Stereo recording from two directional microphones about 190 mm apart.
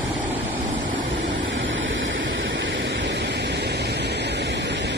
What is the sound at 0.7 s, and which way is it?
Vehicle, 85° right.